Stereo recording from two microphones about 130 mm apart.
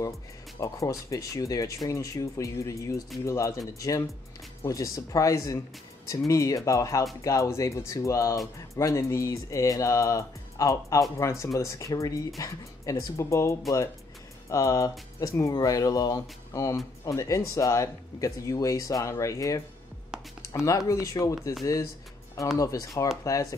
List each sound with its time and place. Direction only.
0.6 s speech: 25° left (ahead or behind)
22.6 s speech: 25° left (ahead or behind)